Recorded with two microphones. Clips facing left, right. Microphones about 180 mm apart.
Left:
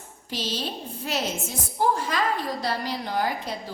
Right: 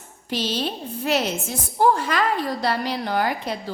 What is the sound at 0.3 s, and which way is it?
A woman's voice, 65° right (ahead or behind).